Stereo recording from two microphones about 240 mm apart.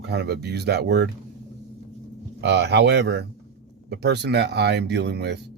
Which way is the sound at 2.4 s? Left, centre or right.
Right.